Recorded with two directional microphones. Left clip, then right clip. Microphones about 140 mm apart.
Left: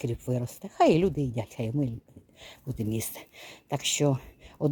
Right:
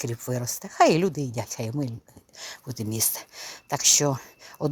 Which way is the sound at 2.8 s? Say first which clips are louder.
Right 4 dB; 30° left (ahead or behind).